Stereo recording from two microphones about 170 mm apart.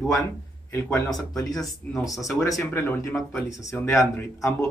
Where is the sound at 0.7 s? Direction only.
15° left (ahead or behind).